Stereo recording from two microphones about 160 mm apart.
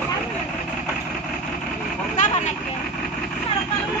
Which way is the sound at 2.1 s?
50° left (ahead or behind).